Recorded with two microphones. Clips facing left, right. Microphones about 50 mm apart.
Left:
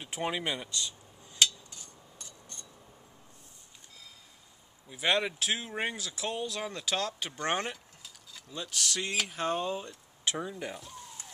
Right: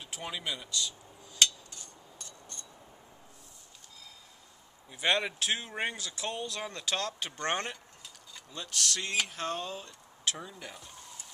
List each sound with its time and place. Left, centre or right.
0.0 s speech: left
1.4 s a sound: centre
4.8 s speech: centre
9.4 s speech: centre